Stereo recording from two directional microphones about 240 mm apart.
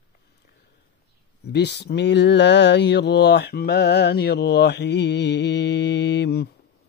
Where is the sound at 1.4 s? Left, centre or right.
Left.